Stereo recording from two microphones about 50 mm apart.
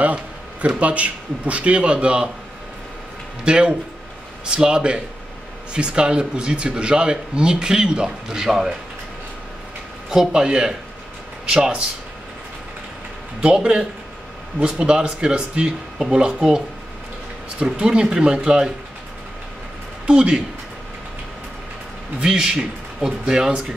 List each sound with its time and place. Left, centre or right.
0.0 s a man's voice: right
3.4 s a man's voice: centre
10.0 s speech: centre
13.4 s speech: centre
20.1 s speech: centre
22.2 s speech: centre